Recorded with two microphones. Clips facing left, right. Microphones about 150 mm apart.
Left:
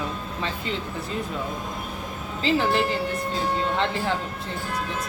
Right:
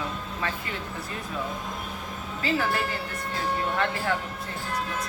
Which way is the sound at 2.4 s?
25° left (ahead or behind).